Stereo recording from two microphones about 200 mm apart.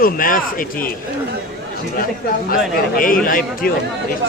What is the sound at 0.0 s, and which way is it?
Speech, 45° left (ahead or behind).